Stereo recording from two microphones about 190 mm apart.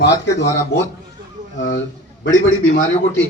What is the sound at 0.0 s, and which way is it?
Speech, 65° left (ahead or behind).